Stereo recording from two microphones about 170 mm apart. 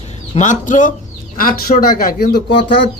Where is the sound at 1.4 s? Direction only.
60° left (ahead or behind).